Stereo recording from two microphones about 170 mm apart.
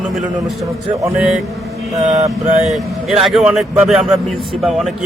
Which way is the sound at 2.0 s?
45° right (ahead or behind).